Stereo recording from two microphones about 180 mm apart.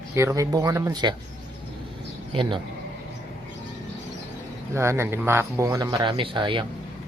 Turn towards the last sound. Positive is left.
turn(degrees=-25)  # may be behind; listen again after turning